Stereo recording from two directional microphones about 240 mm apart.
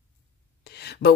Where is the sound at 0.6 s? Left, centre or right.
Left.